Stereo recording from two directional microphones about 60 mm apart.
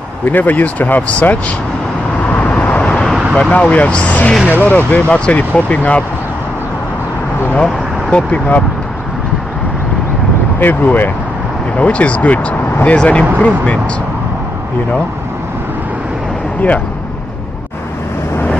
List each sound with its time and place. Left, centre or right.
0.3 s speech: left
2.2 s vehicle: left
3.3 s speech: centre
7.5 s speech: left
10.6 s speech: left